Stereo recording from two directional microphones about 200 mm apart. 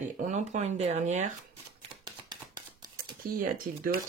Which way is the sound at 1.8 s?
20° right (ahead or behind).